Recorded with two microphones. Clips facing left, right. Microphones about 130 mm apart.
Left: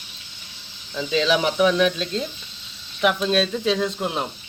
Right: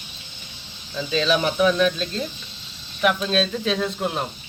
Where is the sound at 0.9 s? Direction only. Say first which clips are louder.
Left 1 dB; 15° left (ahead or behind).